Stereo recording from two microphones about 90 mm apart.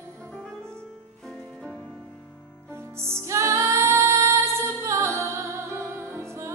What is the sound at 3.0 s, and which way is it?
Music, 30° right (ahead or behind).